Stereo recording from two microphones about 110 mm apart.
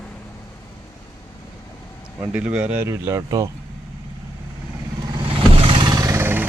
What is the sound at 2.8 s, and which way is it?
Speech, 25° right (ahead or behind).